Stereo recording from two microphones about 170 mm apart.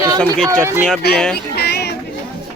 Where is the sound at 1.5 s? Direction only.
70° left (ahead or behind).